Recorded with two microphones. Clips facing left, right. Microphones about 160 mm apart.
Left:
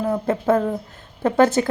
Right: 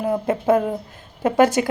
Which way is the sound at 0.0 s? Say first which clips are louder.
Even; 15° right (ahead or behind).